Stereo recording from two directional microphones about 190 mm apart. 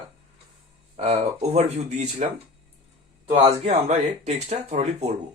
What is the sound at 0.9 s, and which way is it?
Speech, 35° right (ahead or behind).